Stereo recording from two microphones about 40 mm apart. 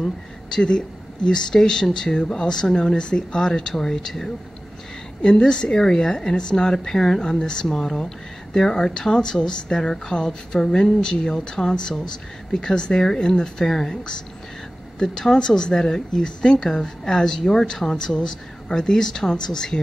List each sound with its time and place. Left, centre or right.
0.5 s a woman's voice: centre
5.2 s a woman's voice: centre
15.0 s a woman's voice: centre